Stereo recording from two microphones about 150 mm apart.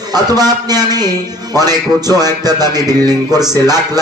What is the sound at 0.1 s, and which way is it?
Speech, 25° right (ahead or behind).